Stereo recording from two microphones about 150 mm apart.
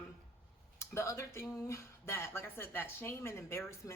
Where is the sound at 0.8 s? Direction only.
20° left (ahead or behind).